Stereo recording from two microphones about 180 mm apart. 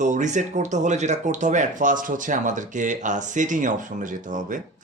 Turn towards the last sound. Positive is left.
turn(degrees=-45)  # may be behind; listen again after turning